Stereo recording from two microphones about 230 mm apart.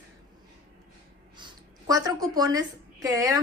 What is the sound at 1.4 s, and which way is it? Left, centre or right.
A woman's voice, centre.